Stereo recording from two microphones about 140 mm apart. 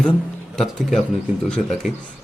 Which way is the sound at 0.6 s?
Centre (ahead or behind).